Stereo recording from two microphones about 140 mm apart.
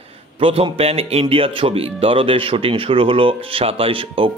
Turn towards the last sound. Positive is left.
turn(degrees=-40)  # may be behind; listen again after turning